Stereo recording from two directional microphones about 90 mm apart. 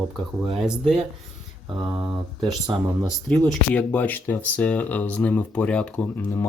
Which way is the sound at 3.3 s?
15° left (ahead or behind).